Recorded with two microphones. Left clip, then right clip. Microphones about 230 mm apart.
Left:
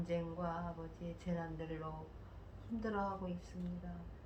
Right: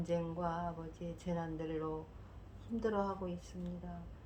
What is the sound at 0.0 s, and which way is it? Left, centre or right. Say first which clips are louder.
Speech: right 3 dB; right.